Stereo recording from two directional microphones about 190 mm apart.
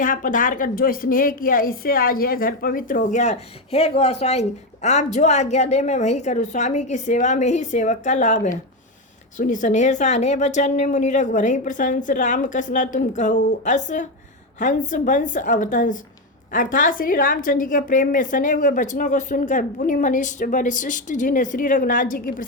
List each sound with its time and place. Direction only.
0.0 s a woman's voice: 45° left (ahead or behind)